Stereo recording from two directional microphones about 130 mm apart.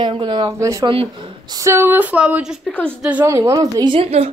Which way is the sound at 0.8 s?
45° right (ahead or behind).